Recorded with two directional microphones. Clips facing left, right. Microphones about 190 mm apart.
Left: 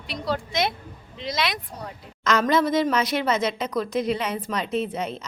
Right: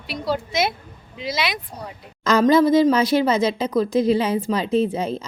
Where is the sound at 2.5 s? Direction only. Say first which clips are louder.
Right 7 dB; 30° right (ahead or behind).